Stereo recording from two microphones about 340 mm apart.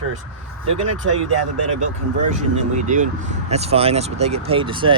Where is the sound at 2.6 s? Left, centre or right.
Right.